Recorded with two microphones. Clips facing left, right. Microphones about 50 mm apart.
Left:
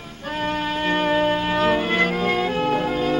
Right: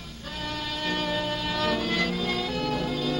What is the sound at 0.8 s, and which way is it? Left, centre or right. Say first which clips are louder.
Music: left 9 dB; left.